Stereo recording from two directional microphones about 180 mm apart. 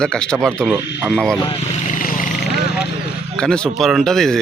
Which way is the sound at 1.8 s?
50° left (ahead or behind).